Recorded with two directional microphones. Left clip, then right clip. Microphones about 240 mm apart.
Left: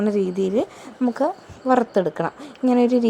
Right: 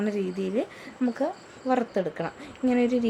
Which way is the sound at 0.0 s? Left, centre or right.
Centre.